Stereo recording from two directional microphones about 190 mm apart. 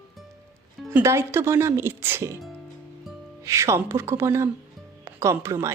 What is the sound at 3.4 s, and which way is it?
Speech, 15° right (ahead or behind).